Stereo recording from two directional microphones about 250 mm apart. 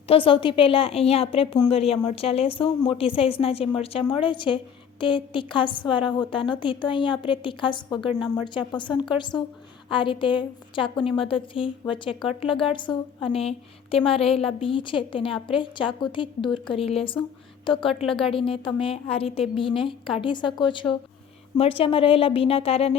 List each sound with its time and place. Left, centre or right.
0.1 s a woman's voice: left